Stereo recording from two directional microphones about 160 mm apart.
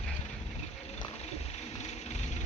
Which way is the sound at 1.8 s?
45° left (ahead or behind).